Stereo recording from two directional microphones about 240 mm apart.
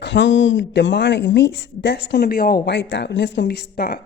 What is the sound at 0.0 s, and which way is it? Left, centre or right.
Speech, left.